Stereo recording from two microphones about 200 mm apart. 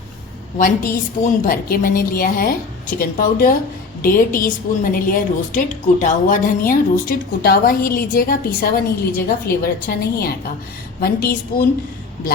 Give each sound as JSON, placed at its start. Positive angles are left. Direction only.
{"t": 0.6, "sound": "a woman's voice", "side_deg": 45}